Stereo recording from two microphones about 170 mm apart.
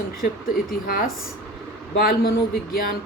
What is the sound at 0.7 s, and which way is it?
A woman's voice, 60° left (ahead or behind).